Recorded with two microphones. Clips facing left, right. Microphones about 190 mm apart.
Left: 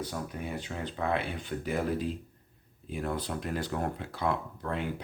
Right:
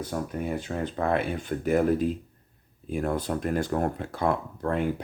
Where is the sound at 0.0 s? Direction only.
50° right (ahead or behind).